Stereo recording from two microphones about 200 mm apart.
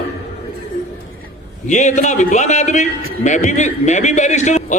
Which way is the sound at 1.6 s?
35° left (ahead or behind).